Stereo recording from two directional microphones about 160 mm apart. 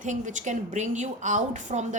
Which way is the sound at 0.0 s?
50° right (ahead or behind).